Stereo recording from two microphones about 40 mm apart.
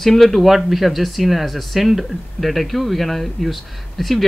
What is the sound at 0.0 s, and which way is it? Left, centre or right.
Speech, centre.